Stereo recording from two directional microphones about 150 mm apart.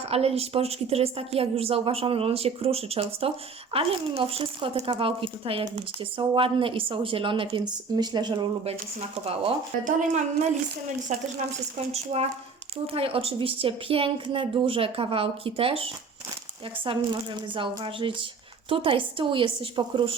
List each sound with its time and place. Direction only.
0.1 s a woman's voice: 40° right (ahead or behind)
9.0 s a woman's voice: 40° right (ahead or behind)
9.8 s a woman's voice: 55° right (ahead or behind); by 20.1 s 35° right (ahead or behind)